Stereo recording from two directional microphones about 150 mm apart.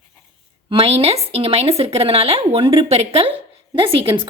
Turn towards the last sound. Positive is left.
turn(degrees=-35)  # may be behind; listen again after turning